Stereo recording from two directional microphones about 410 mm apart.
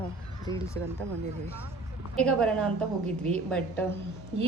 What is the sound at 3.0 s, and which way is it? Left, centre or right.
Speech, centre.